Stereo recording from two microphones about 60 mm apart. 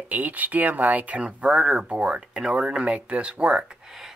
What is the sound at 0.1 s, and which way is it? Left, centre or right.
Speech, right.